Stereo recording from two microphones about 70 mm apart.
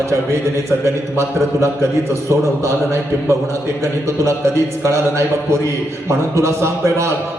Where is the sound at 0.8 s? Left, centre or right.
Right.